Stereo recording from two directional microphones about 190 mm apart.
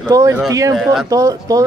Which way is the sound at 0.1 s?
15° right (ahead or behind).